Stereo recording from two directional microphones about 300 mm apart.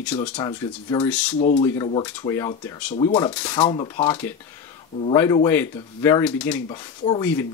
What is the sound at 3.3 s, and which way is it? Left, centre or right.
Speech, centre.